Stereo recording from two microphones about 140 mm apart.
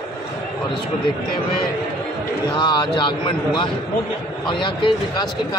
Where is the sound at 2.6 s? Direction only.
35° left (ahead or behind).